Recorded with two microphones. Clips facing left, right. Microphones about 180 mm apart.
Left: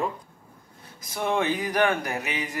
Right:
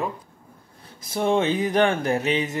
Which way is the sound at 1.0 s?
30° right (ahead or behind).